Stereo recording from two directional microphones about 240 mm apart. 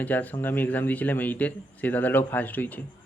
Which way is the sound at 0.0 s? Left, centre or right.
Centre.